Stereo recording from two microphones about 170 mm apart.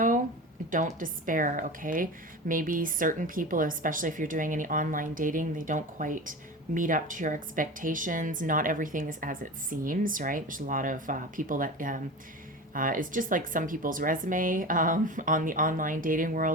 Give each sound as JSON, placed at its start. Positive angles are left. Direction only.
{"t": 0.7, "sound": "a woman's voice", "side_deg": -50}